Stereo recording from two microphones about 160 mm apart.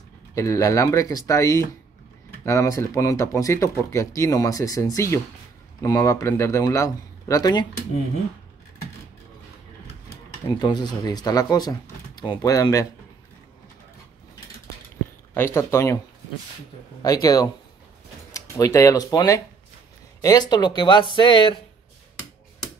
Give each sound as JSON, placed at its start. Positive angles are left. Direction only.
{"t": 0.3, "sound": "speech", "side_deg": 20}
{"t": 10.6, "sound": "speech", "side_deg": 25}
{"t": 15.3, "sound": "speech", "side_deg": 15}
{"t": 17.0, "sound": "speech", "side_deg": 25}